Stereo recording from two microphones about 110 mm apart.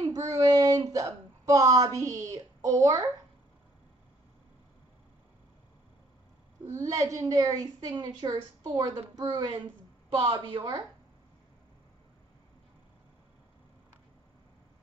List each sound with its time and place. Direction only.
0.3 s a woman's voice: 30° right (ahead or behind)
6.6 s a woman's voice: 25° right (ahead or behind)